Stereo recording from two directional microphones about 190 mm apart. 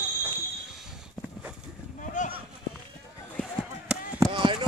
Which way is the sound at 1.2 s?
5° right (ahead or behind).